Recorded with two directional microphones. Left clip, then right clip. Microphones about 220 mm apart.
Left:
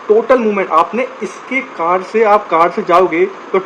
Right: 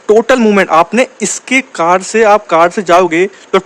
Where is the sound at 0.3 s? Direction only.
70° right (ahead or behind).